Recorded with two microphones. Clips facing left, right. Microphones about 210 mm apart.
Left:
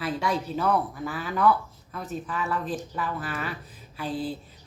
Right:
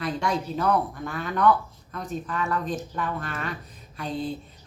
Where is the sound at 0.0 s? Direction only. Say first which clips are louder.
Right 1 dB; 5° left (ahead or behind).